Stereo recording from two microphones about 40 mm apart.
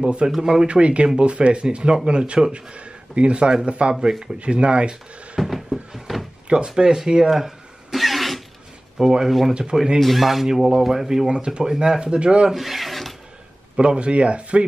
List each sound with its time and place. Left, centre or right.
0.0 s speech: right
0.3 s speech: centre
0.7 s speech: right
5.4 s a sound: centre
6.4 s speech: right
6.7 s throat clearing: centre
9.2 s speech: centre
9.5 s speech: right
9.9 s speech: centre
11.2 s speech: right
12.5 s filing: centre
13.7 s speech: right